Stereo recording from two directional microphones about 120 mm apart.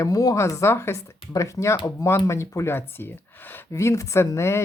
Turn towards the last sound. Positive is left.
turn(degrees=20)  # may be behind; listen again after turning